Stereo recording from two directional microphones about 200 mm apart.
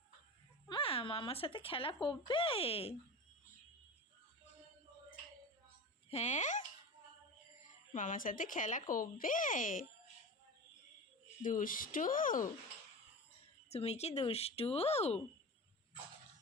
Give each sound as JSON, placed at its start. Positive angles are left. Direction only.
{"t": 0.7, "sound": "speech", "side_deg": 25}
{"t": 6.1, "sound": "speech", "side_deg": 35}
{"t": 7.9, "sound": "speech", "side_deg": 40}
{"t": 11.4, "sound": "speech", "side_deg": 45}
{"t": 13.7, "sound": "speech", "side_deg": 30}